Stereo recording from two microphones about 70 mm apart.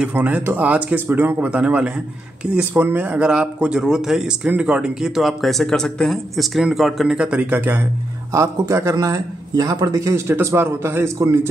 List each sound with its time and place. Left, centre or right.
0.1 s speech: right; by 7.2 s centre
7.2 s speech: centre
8.3 s a man's voice: right
8.9 s a man's voice: right
10.2 s a man's voice: right